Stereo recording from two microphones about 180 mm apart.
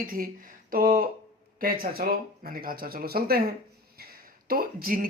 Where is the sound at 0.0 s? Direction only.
50° right (ahead or behind).